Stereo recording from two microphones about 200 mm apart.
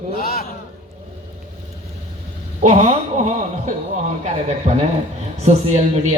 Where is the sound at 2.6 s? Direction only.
35° right (ahead or behind).